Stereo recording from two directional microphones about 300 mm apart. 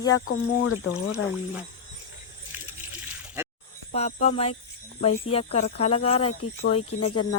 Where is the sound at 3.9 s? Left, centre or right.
Left.